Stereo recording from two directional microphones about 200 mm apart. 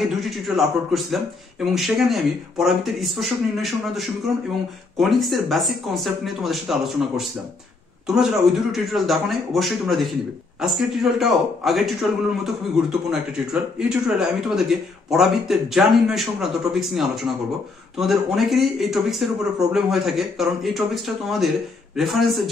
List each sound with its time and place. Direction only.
0.2 s speech: centre (ahead or behind)